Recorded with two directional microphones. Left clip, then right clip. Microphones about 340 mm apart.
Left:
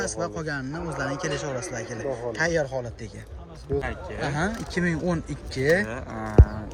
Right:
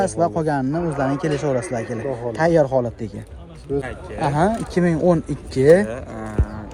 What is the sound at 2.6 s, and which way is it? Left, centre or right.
Speech, right.